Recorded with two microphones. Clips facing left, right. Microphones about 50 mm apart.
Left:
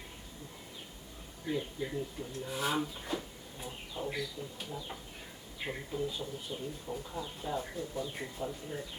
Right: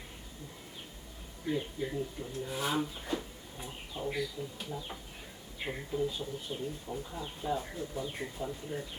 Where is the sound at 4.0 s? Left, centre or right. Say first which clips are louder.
Right 1 dB; centre.